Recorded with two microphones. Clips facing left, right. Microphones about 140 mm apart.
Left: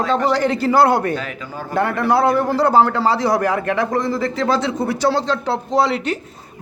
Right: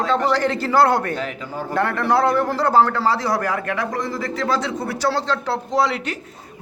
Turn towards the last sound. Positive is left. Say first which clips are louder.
# left 3 dB
turn(degrees=25)  # may be behind; listen again after turning